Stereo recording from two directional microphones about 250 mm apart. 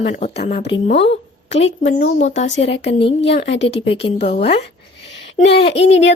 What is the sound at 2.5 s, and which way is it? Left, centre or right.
Speech, left.